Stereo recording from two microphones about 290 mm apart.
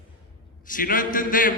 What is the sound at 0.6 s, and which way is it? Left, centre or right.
Speech, left.